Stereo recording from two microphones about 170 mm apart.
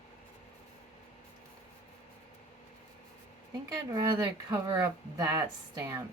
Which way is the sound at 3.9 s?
20° right (ahead or behind).